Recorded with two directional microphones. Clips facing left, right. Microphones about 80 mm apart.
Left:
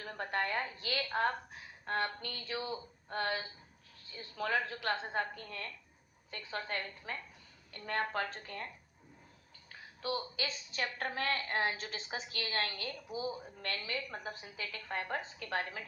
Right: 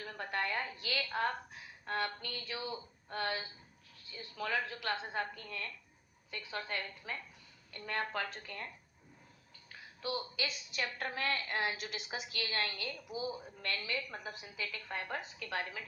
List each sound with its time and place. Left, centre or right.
0.0 s a woman's voice: left
10.0 s a woman's voice: left